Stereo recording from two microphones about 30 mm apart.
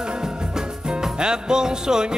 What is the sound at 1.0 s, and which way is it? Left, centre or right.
Music, right.